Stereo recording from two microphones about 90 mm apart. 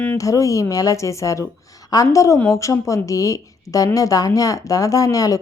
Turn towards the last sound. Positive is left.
turn(degrees=40)  # may be behind; listen again after turning